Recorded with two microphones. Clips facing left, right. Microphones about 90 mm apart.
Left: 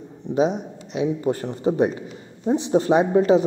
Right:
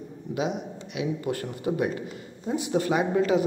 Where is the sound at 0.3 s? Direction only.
30° left (ahead or behind).